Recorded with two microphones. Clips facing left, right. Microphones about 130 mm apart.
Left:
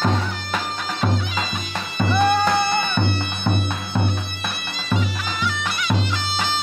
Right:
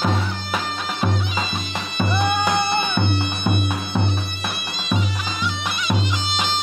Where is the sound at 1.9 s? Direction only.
15° right (ahead or behind).